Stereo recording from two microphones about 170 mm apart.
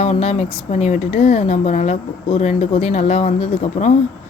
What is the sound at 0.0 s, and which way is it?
Speech, 40° left (ahead or behind).